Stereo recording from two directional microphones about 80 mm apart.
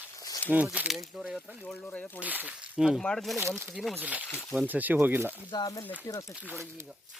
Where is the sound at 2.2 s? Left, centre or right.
Centre.